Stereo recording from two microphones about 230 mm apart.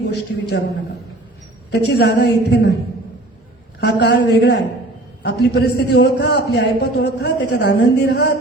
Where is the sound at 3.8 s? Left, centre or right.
Left.